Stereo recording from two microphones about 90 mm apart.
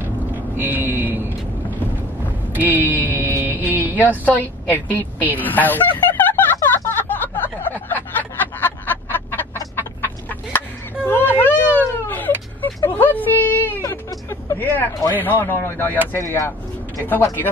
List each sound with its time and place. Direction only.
0.6 s vehicle: 20° right (ahead or behind)
2.7 s speech: 20° right (ahead or behind)
3.1 s vehicle: 25° right (ahead or behind)
4.2 s speech: 20° left (ahead or behind)
4.8 s speech: 20° right (ahead or behind)
5.4 s a sound: 20° left (ahead or behind)
9.8 s chicken: 20° left (ahead or behind)
11.1 s a sound: 20° left (ahead or behind)
12.8 s a sound: 20° left (ahead or behind)
15.0 s speech: 25° left (ahead or behind)
16.2 s a sound: 35° left (ahead or behind)
17.1 s speech: 20° left (ahead or behind)